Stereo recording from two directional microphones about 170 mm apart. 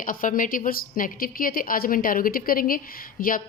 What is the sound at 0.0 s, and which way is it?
A woman's voice, 50° left (ahead or behind).